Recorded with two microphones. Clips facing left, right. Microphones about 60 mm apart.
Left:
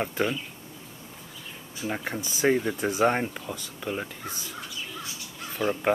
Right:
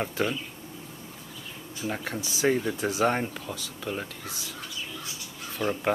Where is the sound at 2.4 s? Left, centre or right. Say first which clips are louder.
Left 2 dB; centre.